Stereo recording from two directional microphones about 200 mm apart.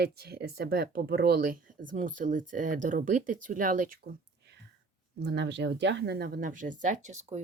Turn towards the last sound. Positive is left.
turn(degrees=-35)  # may be behind; listen again after turning